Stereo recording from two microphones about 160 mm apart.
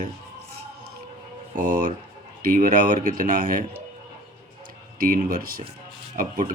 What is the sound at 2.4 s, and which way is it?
Speech, 60° right (ahead or behind).